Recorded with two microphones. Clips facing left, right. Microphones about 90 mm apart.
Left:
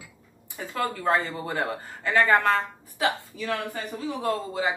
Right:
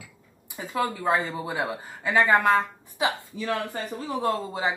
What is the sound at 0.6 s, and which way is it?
Speech, 15° right (ahead or behind).